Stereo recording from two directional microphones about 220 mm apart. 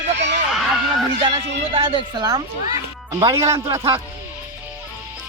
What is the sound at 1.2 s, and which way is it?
A man's voice, 25° right (ahead or behind).